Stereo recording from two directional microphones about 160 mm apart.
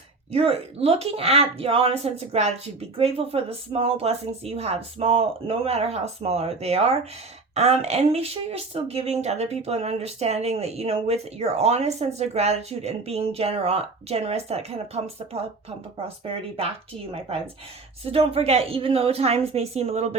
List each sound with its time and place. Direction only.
0.3 s speech: 40° right (ahead or behind)
18.0 s speech: 35° right (ahead or behind)